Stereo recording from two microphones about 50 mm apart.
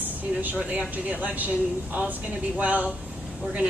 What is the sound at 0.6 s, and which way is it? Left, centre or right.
Speech, right.